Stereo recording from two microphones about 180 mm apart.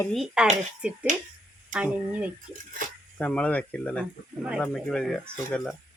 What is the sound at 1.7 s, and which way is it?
Speech, 10° right (ahead or behind).